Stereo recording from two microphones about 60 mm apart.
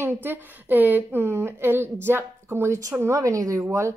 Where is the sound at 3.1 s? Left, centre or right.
Right.